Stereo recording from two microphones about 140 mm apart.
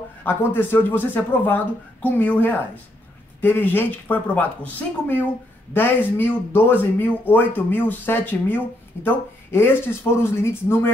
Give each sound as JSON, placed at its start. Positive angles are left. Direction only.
{"t": 0.2, "sound": "speech", "side_deg": 15}